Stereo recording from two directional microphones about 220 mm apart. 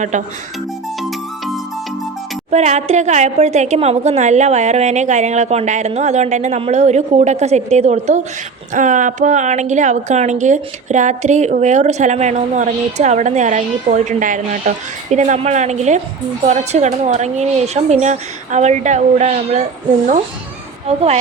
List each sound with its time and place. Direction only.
2.5 s a woman's voice: 30° right (ahead or behind)
20.8 s speech: 30° right (ahead or behind)